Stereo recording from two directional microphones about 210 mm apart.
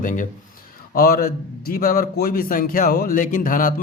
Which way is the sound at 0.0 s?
40° left (ahead or behind).